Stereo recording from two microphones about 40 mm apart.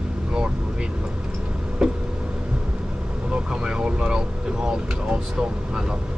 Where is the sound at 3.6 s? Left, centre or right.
Right.